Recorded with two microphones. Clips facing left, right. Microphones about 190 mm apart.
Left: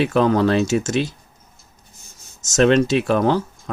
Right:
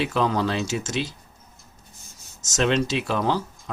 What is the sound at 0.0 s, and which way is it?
Speech, 55° left (ahead or behind).